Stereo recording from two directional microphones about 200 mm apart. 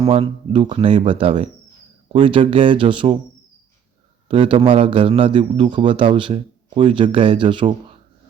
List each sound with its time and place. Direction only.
0.0 s a man's voice: 30° right (ahead or behind)
4.3 s a man's voice: 25° right (ahead or behind)